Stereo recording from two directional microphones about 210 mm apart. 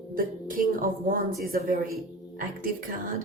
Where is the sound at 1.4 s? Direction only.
45° right (ahead or behind).